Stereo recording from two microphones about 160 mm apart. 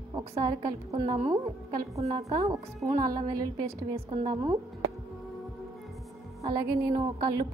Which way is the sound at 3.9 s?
40° right (ahead or behind).